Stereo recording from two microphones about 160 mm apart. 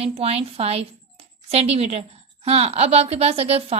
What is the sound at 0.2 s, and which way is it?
A woman's voice, 40° right (ahead or behind).